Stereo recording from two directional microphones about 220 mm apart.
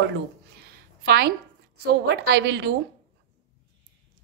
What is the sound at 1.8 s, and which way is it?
Speech, 45° right (ahead or behind).